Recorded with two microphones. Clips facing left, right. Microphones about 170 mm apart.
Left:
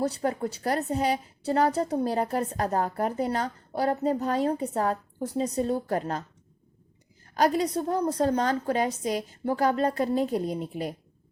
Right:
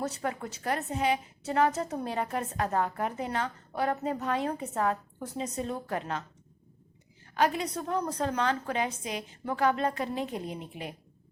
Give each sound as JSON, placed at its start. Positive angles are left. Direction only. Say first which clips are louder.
{"t": 0.0, "sound": "a woman's voice", "louder": "left 6 dB", "side_deg": 35}
{"t": 7.3, "sound": "a woman's voice", "louder": "left 4 dB", "side_deg": 35}